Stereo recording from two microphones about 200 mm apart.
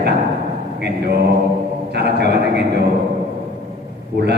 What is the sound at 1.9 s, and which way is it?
Speech, 55° right (ahead or behind).